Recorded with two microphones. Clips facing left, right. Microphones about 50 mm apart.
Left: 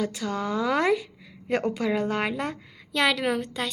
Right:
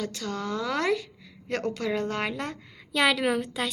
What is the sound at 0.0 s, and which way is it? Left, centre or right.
A woman's voice, centre.